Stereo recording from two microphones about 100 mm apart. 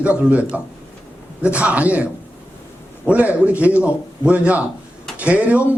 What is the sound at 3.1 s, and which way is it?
A man's voice, 15° right (ahead or behind).